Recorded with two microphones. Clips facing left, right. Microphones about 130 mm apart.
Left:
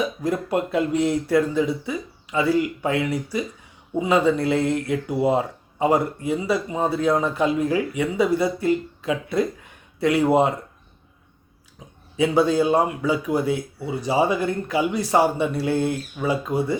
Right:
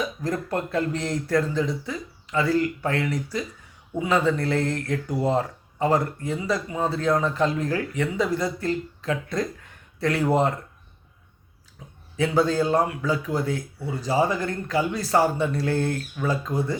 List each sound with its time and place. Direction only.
0.0 s a man's voice: 15° left (ahead or behind)
12.1 s a man's voice: 15° left (ahead or behind)